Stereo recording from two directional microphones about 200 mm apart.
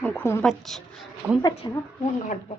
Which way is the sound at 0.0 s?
10° left (ahead or behind).